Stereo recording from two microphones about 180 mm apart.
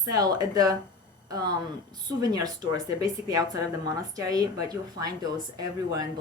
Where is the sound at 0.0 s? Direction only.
20° right (ahead or behind).